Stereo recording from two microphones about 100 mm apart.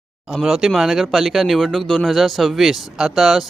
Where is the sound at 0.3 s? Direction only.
Centre (ahead or behind).